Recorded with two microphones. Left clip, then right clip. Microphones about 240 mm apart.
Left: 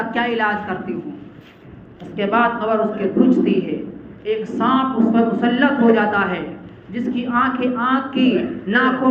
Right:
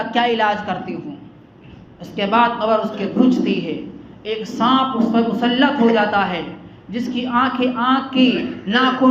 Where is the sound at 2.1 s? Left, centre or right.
Right.